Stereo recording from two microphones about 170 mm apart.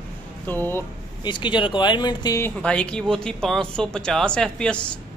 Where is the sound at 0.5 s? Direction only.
15° left (ahead or behind).